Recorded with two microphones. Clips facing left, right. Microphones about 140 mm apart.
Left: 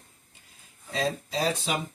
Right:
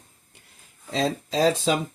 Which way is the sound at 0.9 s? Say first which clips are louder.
Right 5 dB; 90° right.